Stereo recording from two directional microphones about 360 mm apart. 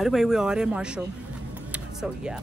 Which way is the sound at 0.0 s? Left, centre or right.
Centre.